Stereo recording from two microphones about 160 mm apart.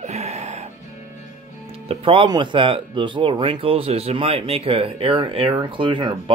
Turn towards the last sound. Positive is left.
turn(degrees=-30)  # may be behind; listen again after turning